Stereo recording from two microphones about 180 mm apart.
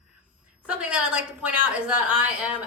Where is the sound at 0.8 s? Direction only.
5° right (ahead or behind).